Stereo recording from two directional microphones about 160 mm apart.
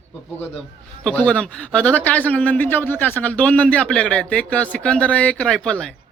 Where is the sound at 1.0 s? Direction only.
5° left (ahead or behind).